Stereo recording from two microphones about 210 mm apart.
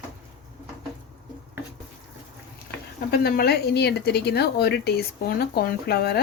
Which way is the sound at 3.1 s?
50° left (ahead or behind).